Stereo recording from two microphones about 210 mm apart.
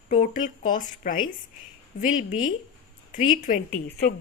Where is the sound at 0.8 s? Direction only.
40° left (ahead or behind).